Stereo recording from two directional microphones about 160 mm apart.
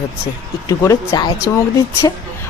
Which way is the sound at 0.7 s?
20° left (ahead or behind).